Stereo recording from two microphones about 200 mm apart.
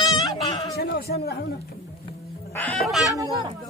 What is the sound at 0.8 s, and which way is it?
Speech, 55° left (ahead or behind).